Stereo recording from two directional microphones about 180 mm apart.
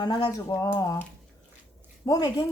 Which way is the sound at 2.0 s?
20° left (ahead or behind).